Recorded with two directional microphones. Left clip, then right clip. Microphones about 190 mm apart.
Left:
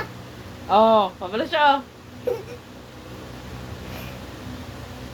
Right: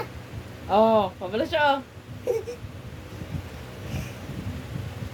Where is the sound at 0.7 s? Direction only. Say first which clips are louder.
Left 4 dB; 20° right (ahead or behind).